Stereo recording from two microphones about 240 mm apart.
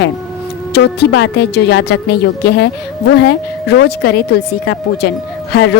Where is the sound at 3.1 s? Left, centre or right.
Left.